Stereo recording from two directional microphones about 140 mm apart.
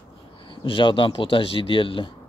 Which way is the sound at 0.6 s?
35° left (ahead or behind).